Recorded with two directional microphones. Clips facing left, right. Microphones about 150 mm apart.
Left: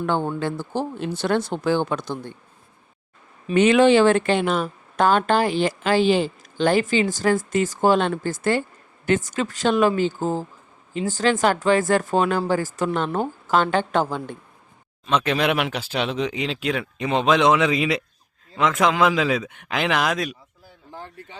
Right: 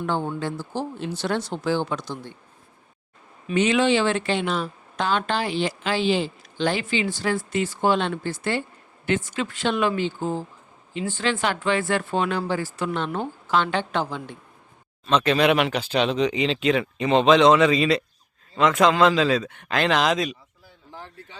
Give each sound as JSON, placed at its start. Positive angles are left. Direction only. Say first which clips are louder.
{"t": 0.0, "sound": "speech", "louder": "left 3 dB", "side_deg": 55}
{"t": 3.5, "sound": "speech", "louder": "left 5 dB", "side_deg": 55}
{"t": 15.0, "sound": "speech", "louder": "right 2 dB", "side_deg": 10}